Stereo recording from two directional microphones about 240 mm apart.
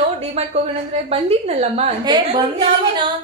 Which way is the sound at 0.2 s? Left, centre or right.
Right.